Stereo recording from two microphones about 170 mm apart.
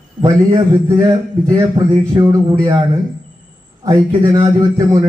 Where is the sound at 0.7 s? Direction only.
20° right (ahead or behind).